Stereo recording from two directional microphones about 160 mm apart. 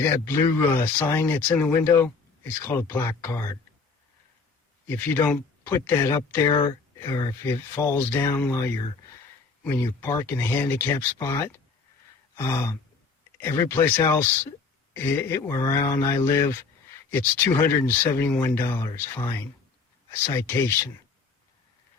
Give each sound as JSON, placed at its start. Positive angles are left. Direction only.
{"t": 0.0, "sound": "speech", "side_deg": 15}
{"t": 4.9, "sound": "speech", "side_deg": 10}
{"t": 6.5, "sound": "speech", "side_deg": 30}